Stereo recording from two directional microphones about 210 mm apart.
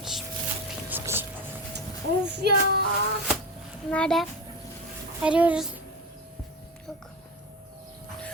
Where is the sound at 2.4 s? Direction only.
50° right (ahead or behind).